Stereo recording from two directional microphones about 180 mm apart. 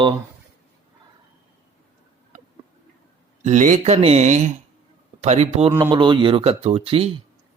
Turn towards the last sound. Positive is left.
turn(degrees=-30)  # may be behind; listen again after turning